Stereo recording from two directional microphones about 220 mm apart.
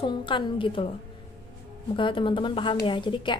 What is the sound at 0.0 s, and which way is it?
Speech, 20° left (ahead or behind).